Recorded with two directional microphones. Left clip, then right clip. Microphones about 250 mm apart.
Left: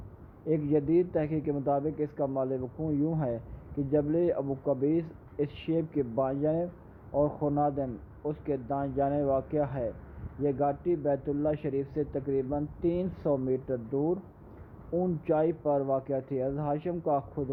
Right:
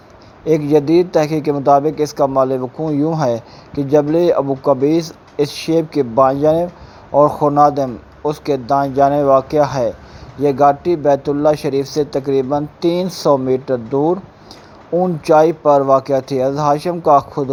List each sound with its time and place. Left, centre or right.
0.4 s a man's voice: centre
15.3 s a man's voice: centre